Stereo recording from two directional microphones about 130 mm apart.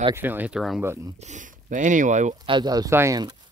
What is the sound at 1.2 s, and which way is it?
Speech, 70° right (ahead or behind).